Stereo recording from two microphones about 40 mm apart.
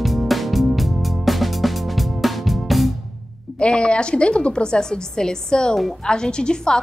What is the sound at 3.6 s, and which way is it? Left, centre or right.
A woman's voice, left.